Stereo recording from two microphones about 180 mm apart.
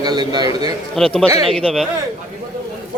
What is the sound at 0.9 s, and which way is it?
Speech, 5° left (ahead or behind).